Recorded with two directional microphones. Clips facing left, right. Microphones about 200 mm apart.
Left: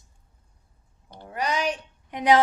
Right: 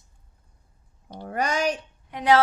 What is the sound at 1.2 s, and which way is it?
Speech, 50° right (ahead or behind).